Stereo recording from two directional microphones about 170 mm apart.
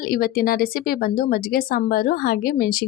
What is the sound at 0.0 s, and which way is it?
A woman's voice, 60° left (ahead or behind).